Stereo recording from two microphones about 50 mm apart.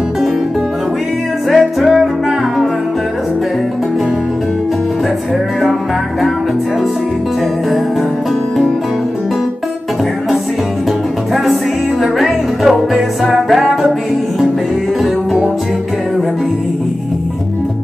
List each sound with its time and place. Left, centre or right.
1.5 s music: centre
12.0 s music: centre